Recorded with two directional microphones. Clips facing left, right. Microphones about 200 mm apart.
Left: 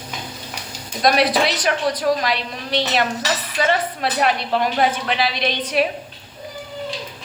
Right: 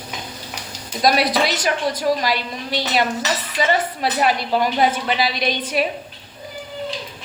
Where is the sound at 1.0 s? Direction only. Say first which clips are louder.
Left 1 dB; centre (ahead or behind).